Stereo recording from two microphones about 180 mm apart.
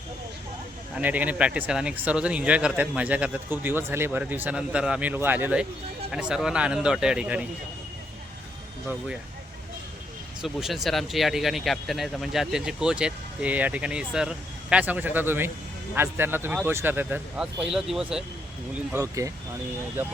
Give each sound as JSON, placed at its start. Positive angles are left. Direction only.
{"t": 0.9, "sound": "speech", "side_deg": -10}
{"t": 10.4, "sound": "speech", "side_deg": 0}
{"t": 18.9, "sound": "speech", "side_deg": -15}